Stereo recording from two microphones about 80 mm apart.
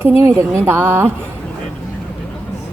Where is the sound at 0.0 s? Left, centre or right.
Right.